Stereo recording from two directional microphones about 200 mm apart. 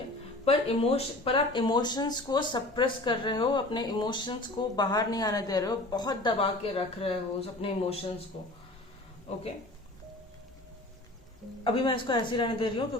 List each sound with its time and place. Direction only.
0.4 s speech: 30° left (ahead or behind)
11.6 s speech: 25° left (ahead or behind)